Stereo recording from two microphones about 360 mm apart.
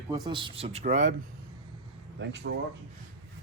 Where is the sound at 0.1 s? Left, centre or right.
Centre.